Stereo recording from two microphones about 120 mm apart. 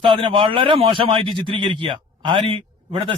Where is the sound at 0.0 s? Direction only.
45° right (ahead or behind).